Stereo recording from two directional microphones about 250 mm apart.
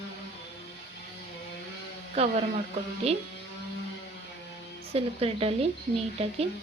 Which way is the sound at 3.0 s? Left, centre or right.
Right.